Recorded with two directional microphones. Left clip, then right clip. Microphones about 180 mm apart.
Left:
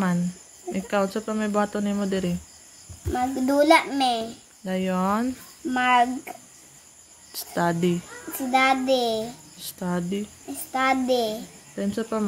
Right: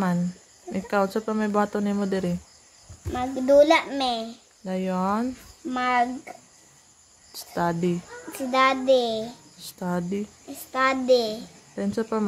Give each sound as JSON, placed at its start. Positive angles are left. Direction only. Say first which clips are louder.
{"t": 0.7, "sound": "a child's voice", "louder": "even", "side_deg": -15}
{"t": 7.3, "sound": "speech", "louder": "left 1 dB", "side_deg": -5}
{"t": 8.3, "sound": "a child's voice", "louder": "left 1 dB", "side_deg": -20}